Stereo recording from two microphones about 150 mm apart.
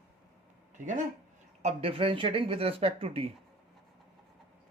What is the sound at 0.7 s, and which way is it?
Speech, 55° right (ahead or behind).